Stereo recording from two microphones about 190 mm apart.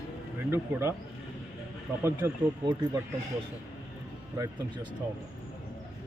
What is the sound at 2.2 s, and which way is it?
Speech, 10° right (ahead or behind).